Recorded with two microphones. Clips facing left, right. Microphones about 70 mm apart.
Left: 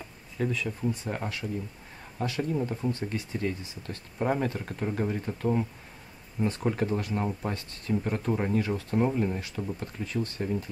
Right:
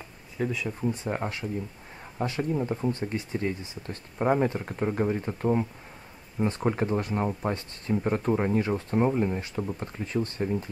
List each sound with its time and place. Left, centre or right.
0.4 s speech: centre
8.3 s speech: centre
8.5 s speech: right